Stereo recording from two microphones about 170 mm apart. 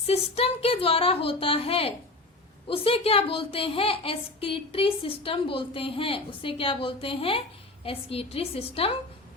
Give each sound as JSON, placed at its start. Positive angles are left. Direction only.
{"t": 0.1, "sound": "a woman's voice", "side_deg": 35}